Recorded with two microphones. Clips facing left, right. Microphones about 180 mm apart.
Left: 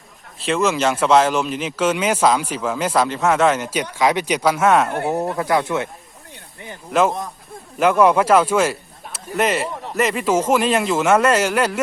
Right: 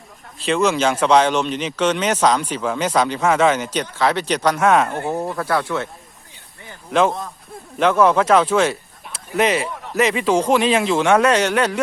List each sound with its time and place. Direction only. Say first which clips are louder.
0.3 s speech: right 1 dB; centre (ahead or behind)
5.4 s speech: left 2 dB; 15° left (ahead or behind)
7.8 s speech: left 1 dB; 10° left (ahead or behind)